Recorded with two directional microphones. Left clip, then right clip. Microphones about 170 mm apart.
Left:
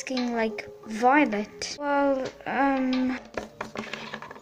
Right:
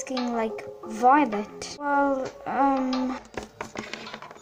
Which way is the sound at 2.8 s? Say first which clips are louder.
Even; 40° right (ahead or behind).